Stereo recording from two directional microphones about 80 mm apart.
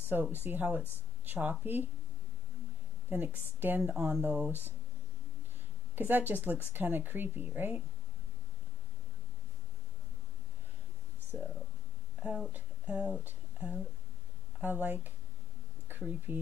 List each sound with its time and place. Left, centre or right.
0.1 s speech: right
3.1 s speech: right
5.9 s speech: right
12.5 s speech: centre
15.9 s a sound: right
16.3 s speech: right